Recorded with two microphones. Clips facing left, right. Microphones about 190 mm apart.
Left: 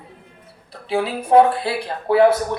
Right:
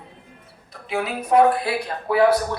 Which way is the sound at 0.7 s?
30° left (ahead or behind).